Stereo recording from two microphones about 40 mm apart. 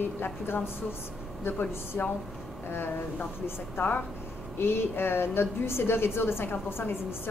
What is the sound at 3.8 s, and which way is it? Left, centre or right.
A woman's voice, left.